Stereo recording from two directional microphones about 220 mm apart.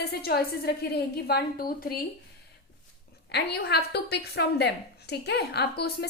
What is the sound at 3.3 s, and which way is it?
A woman's voice, 45° left (ahead or behind).